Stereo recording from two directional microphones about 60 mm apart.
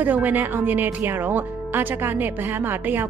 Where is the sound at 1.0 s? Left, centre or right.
Right.